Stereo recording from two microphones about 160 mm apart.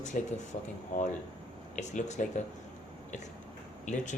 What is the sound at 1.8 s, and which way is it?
Speech, 50° left (ahead or behind).